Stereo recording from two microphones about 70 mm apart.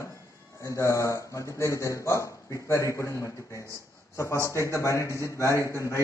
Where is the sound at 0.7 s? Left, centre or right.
Left.